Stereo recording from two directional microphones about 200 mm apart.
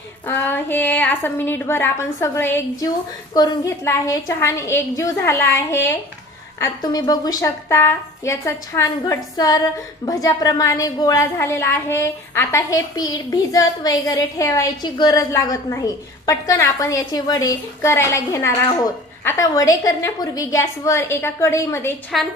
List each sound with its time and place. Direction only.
0.3 s a woman's voice: 10° left (ahead or behind)